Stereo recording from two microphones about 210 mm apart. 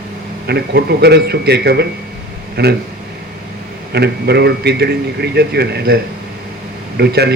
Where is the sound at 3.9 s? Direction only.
50° right (ahead or behind).